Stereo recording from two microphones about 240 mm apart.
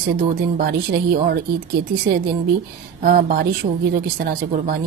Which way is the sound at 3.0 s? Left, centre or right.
Right.